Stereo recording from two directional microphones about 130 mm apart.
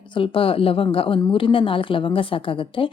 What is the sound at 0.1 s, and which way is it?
A woman's voice, 45° left (ahead or behind).